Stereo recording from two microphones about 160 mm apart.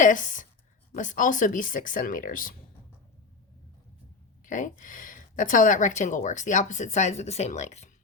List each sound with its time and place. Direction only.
0.0 s a woman's voice: 55° left (ahead or behind)
4.4 s speech: 55° left (ahead or behind)